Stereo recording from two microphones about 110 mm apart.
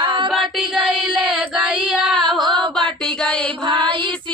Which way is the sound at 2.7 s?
5° left (ahead or behind).